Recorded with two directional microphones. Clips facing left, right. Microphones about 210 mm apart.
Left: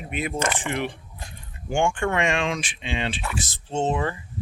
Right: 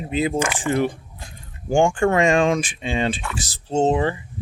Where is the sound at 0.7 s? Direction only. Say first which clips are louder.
Right 7 dB; 40° right (ahead or behind).